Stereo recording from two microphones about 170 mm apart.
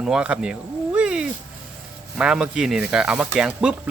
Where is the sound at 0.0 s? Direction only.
5° right (ahead or behind).